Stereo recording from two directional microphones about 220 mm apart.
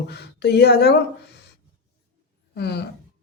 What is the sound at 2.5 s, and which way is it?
Speech, 50° left (ahead or behind).